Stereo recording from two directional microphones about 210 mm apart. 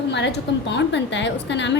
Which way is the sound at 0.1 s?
55° left (ahead or behind).